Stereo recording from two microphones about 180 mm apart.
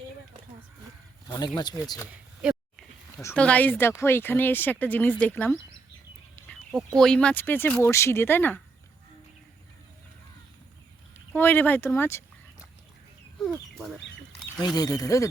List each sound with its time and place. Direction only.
1.3 s speech: 20° left (ahead or behind)
3.2 s speech: 10° left (ahead or behind)
11.3 s speech: 10° left (ahead or behind)
14.8 s speech: 20° left (ahead or behind)